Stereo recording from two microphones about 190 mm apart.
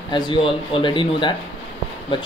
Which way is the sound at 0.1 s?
25° left (ahead or behind).